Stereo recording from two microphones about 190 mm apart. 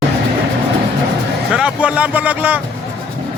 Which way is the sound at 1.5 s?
5° right (ahead or behind).